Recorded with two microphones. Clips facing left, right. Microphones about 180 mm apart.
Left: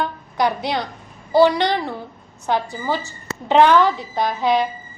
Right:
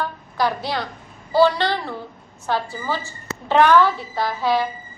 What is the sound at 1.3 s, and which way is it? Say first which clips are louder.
A woman's voice: left 2 dB; 15° left (ahead or behind).